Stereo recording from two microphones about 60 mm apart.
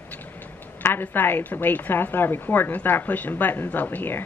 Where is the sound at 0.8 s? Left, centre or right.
Left.